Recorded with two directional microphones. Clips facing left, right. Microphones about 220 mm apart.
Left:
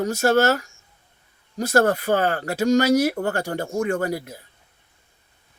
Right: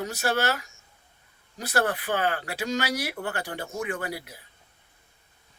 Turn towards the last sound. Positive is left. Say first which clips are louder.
# left 9 dB
turn(degrees=45)  # may be behind; listen again after turning